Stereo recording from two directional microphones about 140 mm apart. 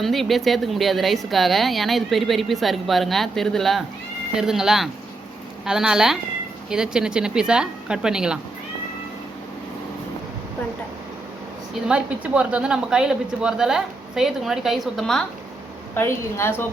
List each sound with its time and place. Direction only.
0.0 s speech: centre (ahead or behind)
11.9 s speech: 10° right (ahead or behind)
16.0 s a woman's voice: 15° left (ahead or behind)